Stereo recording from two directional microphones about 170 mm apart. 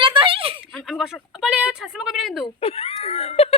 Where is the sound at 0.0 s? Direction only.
30° right (ahead or behind).